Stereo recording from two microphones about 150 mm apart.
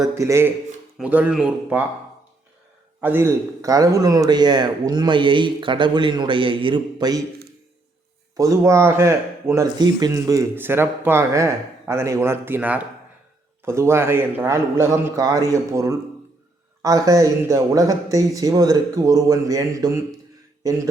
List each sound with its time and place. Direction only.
0.0 s speech: 20° right (ahead or behind)
3.0 s speech: 15° right (ahead or behind)
8.4 s speech: 20° right (ahead or behind)